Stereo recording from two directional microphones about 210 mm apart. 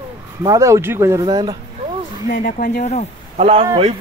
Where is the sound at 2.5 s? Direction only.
40° left (ahead or behind).